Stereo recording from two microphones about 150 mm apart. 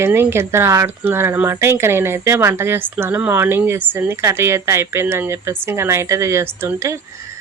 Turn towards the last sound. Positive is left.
turn(degrees=-20)  # may be behind; listen again after turning